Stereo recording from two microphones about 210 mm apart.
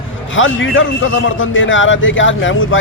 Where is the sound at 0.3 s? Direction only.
65° left (ahead or behind).